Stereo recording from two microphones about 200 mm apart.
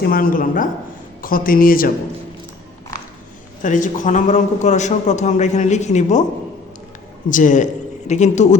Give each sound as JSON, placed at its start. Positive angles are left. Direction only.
{"t": 0.0, "sound": "speech", "side_deg": 45}
{"t": 3.6, "sound": "a man's voice", "side_deg": 40}
{"t": 7.3, "sound": "a man's voice", "side_deg": 40}